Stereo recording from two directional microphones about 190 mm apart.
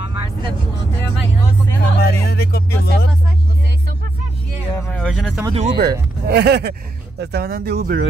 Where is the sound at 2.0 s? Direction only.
55° left (ahead or behind).